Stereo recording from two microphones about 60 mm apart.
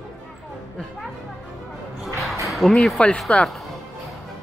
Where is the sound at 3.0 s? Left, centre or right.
Centre.